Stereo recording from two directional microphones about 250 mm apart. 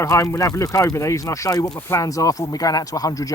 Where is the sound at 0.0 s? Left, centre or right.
Centre.